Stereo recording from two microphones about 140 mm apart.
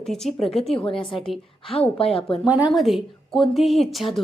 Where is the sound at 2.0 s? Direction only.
45° left (ahead or behind).